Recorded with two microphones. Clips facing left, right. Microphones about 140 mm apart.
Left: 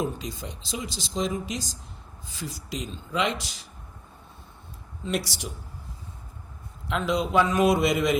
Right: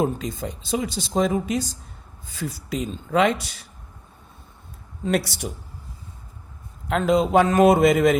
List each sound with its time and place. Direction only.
0.0 s speech: 50° right (ahead or behind)
5.0 s a man's voice: 55° right (ahead or behind)
6.8 s a man's voice: 50° right (ahead or behind)